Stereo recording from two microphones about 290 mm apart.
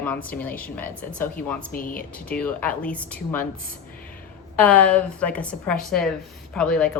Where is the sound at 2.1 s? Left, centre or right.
Centre.